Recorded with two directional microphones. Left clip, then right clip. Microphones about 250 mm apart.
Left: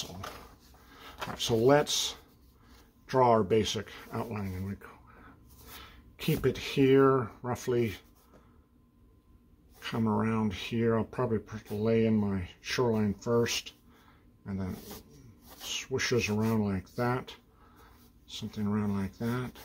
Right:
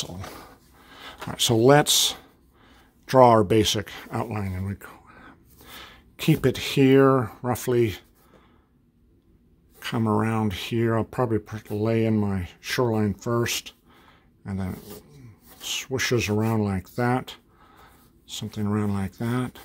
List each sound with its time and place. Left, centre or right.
0.8 s speech: right
9.8 s speech: right